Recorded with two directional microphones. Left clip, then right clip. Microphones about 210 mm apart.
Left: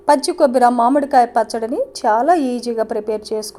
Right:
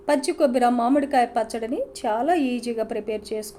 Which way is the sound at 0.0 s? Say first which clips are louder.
Left 7 dB; 15° left (ahead or behind).